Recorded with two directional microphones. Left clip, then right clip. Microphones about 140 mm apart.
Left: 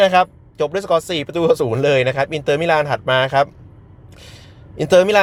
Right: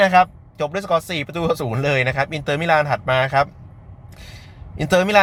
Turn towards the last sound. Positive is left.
turn(degrees=20)  # may be behind; listen again after turning